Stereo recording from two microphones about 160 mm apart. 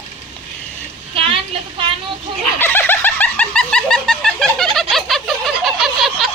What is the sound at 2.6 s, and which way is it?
Snicker, 15° left (ahead or behind).